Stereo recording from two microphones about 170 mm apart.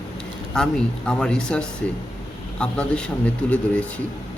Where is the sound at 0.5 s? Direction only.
5° left (ahead or behind).